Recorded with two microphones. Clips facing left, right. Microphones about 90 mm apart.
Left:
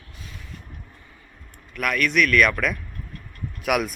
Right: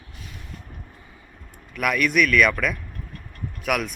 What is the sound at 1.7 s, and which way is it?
Speech, 5° right (ahead or behind).